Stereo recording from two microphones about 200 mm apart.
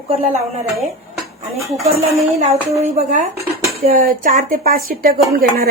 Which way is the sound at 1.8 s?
30° right (ahead or behind).